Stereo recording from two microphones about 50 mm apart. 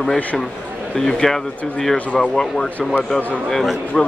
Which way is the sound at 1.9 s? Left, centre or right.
Left.